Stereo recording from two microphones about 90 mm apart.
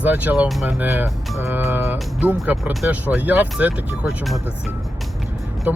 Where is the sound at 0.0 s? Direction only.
20° right (ahead or behind).